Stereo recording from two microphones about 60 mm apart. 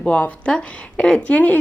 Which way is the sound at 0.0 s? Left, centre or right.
Left.